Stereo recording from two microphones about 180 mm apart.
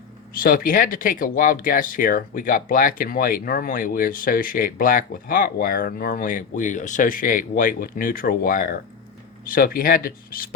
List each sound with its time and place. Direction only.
0.3 s speech: 55° left (ahead or behind)